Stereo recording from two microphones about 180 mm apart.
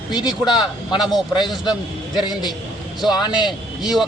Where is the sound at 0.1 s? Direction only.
25° left (ahead or behind).